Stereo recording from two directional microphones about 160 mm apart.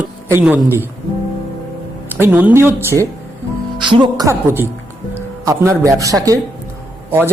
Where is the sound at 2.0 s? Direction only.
15° right (ahead or behind).